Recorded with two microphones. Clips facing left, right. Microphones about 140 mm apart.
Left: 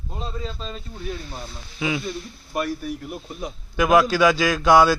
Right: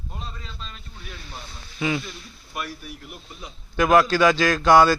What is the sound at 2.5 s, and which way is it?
Speech, 40° left (ahead or behind).